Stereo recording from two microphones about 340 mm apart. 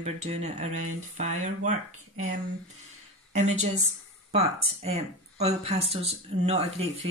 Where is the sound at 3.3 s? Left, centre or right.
Centre.